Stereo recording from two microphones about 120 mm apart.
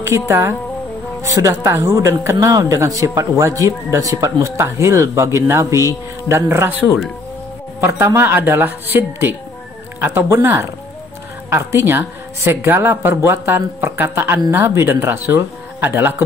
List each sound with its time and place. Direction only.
0.3 s speech: 20° right (ahead or behind)
7.8 s speech: 20° right (ahead or behind)